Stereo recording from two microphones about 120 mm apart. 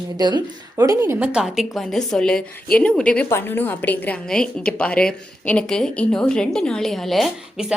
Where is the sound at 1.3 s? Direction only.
5° right (ahead or behind).